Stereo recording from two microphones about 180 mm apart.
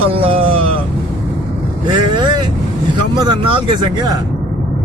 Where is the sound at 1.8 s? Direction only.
25° right (ahead or behind).